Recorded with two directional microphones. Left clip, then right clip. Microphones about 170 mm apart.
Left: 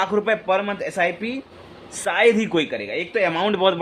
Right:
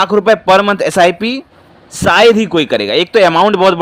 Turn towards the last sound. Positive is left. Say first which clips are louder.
# right 10 dB
turn(degrees=-35)  # may be behind; listen again after turning